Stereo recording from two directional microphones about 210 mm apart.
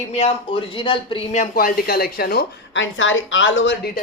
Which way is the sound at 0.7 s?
25° left (ahead or behind).